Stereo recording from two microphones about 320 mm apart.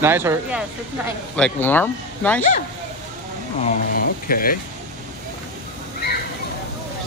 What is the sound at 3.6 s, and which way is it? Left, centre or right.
Speech, left.